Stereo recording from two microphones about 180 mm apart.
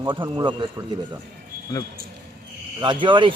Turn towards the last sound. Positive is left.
turn(degrees=-25)  # may be behind; listen again after turning